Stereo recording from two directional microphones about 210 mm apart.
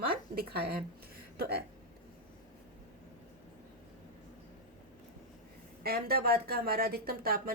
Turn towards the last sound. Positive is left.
turn(degrees=-45)  # may be behind; listen again after turning